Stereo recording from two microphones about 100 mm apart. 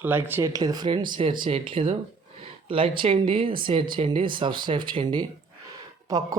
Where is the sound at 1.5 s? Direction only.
70° right (ahead or behind); by 5.2 s 50° right (ahead or behind).